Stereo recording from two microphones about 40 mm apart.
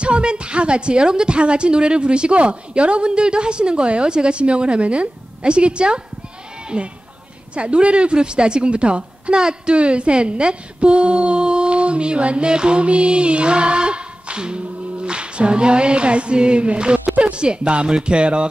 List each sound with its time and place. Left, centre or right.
0.0 s a woman's voice: right